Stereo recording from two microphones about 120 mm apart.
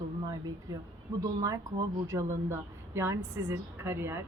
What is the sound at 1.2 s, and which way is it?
A woman's voice, 30° right (ahead or behind).